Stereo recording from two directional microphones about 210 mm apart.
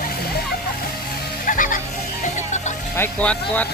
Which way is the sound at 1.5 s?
40° left (ahead or behind).